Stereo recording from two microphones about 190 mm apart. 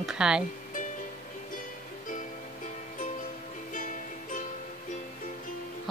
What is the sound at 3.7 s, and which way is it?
Music, 45° left (ahead or behind).